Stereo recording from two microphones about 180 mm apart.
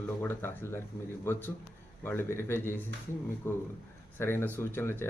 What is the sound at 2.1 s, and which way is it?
Speech, 15° left (ahead or behind).